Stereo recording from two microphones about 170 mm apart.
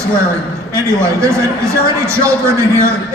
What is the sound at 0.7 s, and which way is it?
A man's voice, 15° right (ahead or behind).